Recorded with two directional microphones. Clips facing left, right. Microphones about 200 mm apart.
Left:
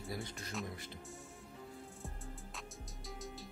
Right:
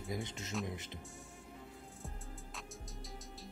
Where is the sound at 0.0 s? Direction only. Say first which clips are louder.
Right 2 dB; 20° right (ahead or behind).